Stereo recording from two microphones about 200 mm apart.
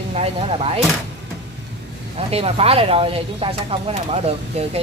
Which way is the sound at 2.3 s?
30° right (ahead or behind).